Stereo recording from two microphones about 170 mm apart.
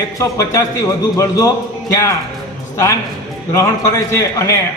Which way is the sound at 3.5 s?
15° left (ahead or behind).